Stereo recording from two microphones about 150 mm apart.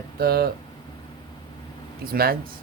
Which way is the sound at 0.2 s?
90° right.